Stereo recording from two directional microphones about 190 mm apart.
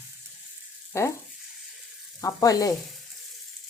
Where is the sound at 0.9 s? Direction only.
15° left (ahead or behind).